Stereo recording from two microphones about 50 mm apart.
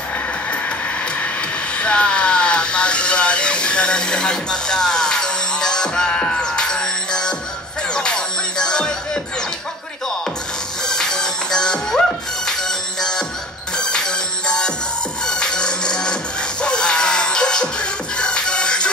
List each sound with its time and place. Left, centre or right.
1.8 s a sound: left
7.9 s music: centre
10.9 s music: centre